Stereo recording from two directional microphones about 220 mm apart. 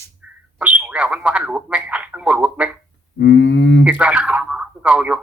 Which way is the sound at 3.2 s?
55° left (ahead or behind).